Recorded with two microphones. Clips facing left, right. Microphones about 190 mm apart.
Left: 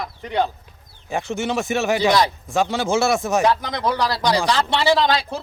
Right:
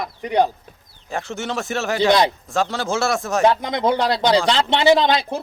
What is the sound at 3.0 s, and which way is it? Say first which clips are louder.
Speech: left 2 dB; centre (ahead or behind).